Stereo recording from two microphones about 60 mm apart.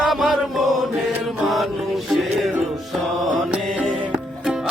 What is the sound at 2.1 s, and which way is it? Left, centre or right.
Music, centre.